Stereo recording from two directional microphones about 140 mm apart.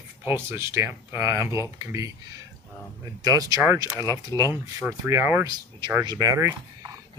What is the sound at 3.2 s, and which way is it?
Speech, 25° right (ahead or behind).